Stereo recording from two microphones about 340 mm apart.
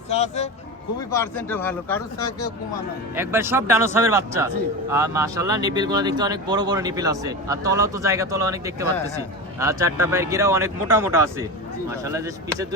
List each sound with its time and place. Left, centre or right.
0.1 s speech: centre
1.1 s speech: centre
3.2 s speech: centre